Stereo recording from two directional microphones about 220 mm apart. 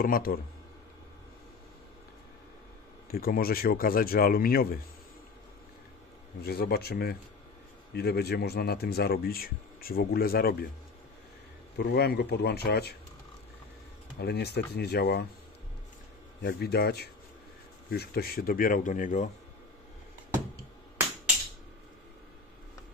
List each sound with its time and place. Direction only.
0.0 s speech: 40° left (ahead or behind)
3.1 s speech: 40° left (ahead or behind)
6.4 s speech: 45° left (ahead or behind)
11.8 s speech: 45° left (ahead or behind)
14.1 s speech: 45° left (ahead or behind)
16.4 s speech: 45° left (ahead or behind)